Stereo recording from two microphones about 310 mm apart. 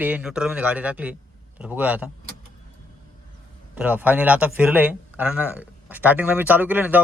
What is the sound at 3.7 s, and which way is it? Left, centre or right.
A man's voice, centre.